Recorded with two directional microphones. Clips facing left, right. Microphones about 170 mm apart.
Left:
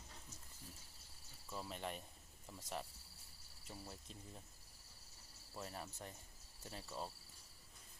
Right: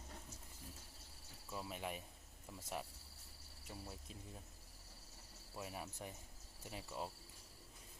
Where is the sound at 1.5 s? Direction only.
5° right (ahead or behind).